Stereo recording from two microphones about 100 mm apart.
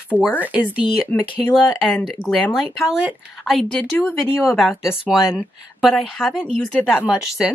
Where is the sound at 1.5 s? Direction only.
Centre (ahead or behind).